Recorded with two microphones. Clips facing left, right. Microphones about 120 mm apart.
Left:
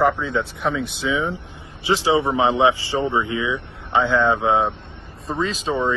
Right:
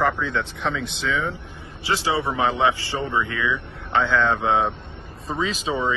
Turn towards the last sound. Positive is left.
turn(degrees=0)  # may be behind; listen again after turning